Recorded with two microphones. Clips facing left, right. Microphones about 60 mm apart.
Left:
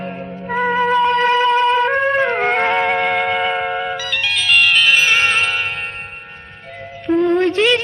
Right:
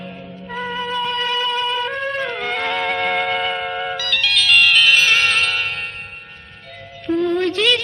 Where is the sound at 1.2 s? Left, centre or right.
Left.